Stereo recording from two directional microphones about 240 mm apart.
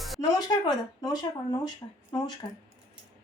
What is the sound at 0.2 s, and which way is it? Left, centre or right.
Speech, centre.